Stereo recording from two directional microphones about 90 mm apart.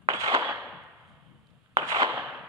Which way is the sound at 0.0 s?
35° right (ahead or behind).